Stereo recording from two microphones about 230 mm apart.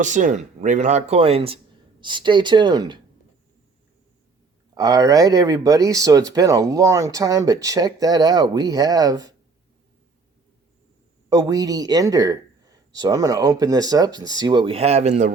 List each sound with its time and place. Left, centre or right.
0.0 s speech: right
4.7 s speech: centre
11.3 s speech: centre